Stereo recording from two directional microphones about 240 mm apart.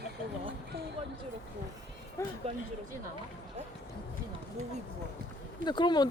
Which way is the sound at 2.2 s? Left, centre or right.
Centre.